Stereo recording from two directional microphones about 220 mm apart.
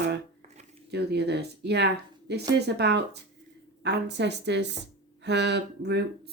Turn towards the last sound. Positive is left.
turn(degrees=-50)  # may be behind; listen again after turning